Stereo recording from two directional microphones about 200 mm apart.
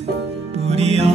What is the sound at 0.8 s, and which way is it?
Music, 30° right (ahead or behind).